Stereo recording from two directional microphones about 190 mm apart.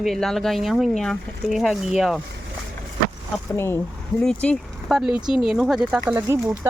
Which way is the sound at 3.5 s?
10° left (ahead or behind).